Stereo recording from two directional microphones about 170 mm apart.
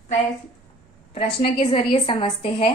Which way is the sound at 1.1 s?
35° left (ahead or behind).